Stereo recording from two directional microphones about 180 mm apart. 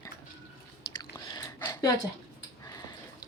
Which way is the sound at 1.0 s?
20° left (ahead or behind).